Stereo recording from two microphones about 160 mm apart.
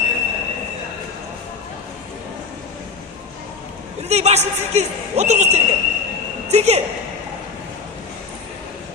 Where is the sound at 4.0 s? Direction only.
45° right (ahead or behind).